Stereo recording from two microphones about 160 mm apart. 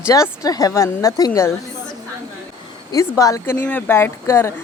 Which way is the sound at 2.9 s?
20° left (ahead or behind).